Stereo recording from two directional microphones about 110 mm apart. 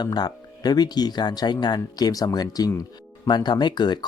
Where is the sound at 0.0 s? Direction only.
40° left (ahead or behind).